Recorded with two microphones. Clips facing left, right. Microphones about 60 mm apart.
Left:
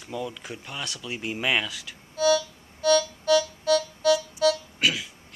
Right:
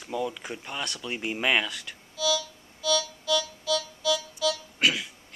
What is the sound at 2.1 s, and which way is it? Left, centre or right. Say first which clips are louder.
Music: left 6 dB; left.